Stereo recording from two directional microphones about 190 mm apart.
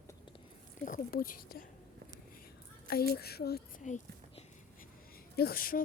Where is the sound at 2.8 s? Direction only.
55° left (ahead or behind).